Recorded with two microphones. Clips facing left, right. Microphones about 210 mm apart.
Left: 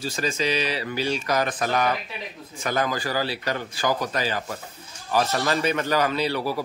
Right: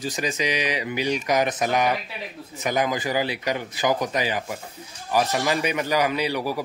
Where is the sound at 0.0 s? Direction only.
15° right (ahead or behind).